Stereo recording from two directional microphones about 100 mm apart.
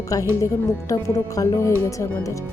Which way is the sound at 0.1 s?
35° left (ahead or behind).